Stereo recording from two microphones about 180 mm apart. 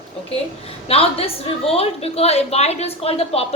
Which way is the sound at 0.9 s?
35° left (ahead or behind).